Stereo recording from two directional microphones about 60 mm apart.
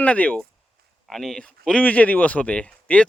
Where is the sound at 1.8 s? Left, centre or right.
Left.